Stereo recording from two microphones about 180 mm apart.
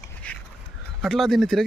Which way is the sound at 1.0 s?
Centre (ahead or behind).